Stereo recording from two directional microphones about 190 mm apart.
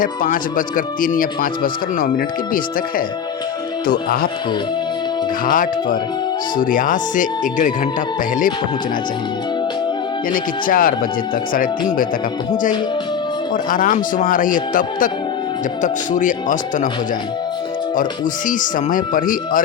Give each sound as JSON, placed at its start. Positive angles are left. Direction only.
{"t": 0.0, "sound": "speech", "side_deg": 45}
{"t": 5.5, "sound": "speech", "side_deg": 45}
{"t": 10.3, "sound": "speech", "side_deg": 45}
{"t": 13.7, "sound": "speech", "side_deg": 45}
{"t": 18.4, "sound": "speech", "side_deg": 45}